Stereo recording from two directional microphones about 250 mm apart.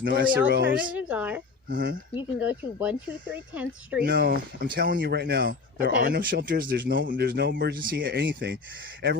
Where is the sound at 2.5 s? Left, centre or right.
Centre.